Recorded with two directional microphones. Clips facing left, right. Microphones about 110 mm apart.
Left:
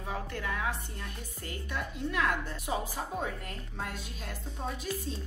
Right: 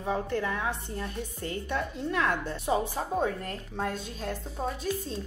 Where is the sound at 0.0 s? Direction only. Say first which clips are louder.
Right 7 dB; 30° right (ahead or behind).